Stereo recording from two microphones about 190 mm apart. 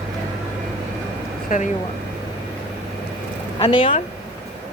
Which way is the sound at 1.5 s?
45° left (ahead or behind).